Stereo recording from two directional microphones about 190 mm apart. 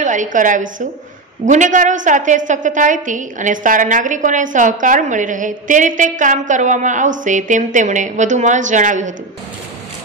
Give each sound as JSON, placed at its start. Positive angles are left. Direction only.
{"t": 0.0, "sound": "a woman's voice", "side_deg": -40}